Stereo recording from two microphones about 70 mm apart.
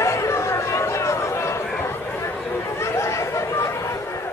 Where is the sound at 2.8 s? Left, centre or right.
Left.